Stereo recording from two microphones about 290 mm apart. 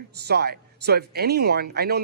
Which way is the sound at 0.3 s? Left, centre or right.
Right.